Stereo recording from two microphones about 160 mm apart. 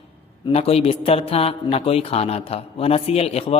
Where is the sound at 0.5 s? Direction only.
35° left (ahead or behind).